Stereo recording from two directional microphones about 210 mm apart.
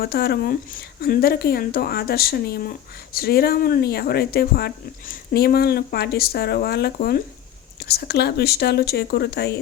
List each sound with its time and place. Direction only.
0.0 s speech: 50° left (ahead or behind)